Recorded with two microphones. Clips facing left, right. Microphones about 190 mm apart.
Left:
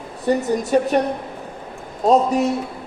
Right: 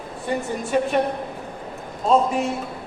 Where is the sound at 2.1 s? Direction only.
40° left (ahead or behind).